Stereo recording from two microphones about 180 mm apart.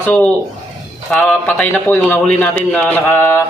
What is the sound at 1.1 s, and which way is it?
Speech, 5° left (ahead or behind).